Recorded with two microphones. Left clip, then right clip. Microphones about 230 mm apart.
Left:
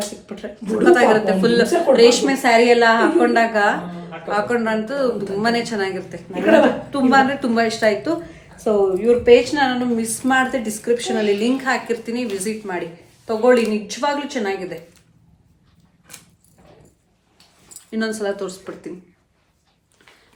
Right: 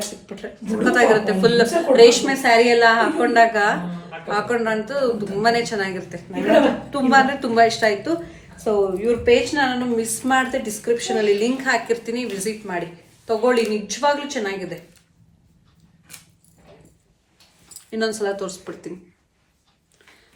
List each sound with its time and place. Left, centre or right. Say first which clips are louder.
0.3 s speech: left 3 dB; centre
17.9 s speech: even; centre